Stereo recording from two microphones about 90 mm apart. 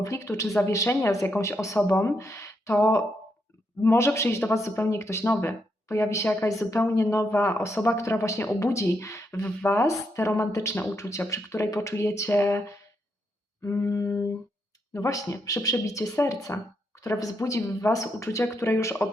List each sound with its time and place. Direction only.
0.0 s speech: 35° left (ahead or behind)